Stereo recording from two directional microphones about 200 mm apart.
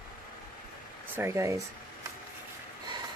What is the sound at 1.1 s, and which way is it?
Speech, 15° right (ahead or behind).